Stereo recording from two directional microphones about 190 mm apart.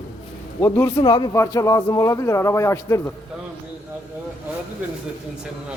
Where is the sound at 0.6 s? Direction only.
15° left (ahead or behind).